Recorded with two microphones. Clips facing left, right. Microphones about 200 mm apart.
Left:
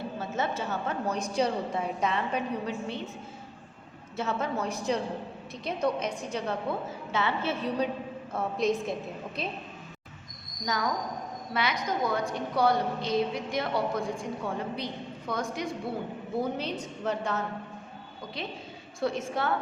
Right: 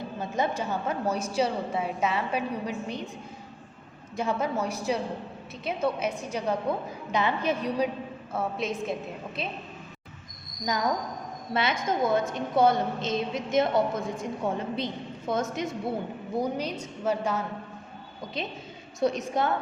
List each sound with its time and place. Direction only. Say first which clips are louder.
0.2 s a woman's voice: right 4 dB; 15° right (ahead or behind)
4.2 s a woman's voice: right 2 dB; 10° right (ahead or behind)
8.3 s a woman's voice: left 3 dB; 5° right (ahead or behind)
11.5 s a woman's voice: right 3 dB; 25° right (ahead or behind)
16.4 s a woman's voice: right 2 dB; 10° right (ahead or behind)
18.4 s a woman's voice: right 3 dB; 20° right (ahead or behind)